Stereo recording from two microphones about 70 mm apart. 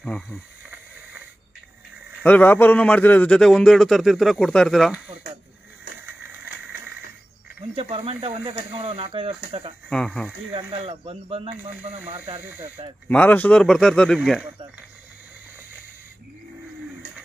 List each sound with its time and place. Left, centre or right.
2.2 s a man's voice: left
3.3 s speech: centre
6.3 s a sound: right
9.8 s speech: centre
11.7 s speech: right
13.1 s a man's voice: left
13.6 s speech: centre